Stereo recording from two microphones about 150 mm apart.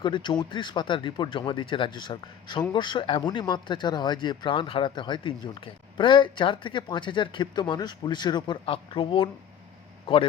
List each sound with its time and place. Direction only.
0.0 s speech: 30° left (ahead or behind)